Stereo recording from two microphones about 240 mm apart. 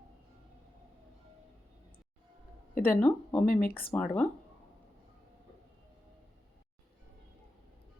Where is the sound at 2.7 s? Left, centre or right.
Left.